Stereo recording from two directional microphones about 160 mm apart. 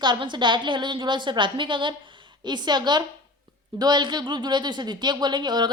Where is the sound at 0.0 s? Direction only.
30° right (ahead or behind).